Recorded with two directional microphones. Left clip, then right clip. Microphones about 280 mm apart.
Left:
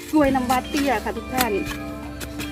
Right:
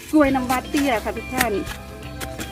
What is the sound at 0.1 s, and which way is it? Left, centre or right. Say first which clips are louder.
Speech: right 1 dB; centre.